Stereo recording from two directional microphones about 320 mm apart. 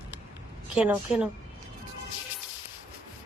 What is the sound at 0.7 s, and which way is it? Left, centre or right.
Speech, centre.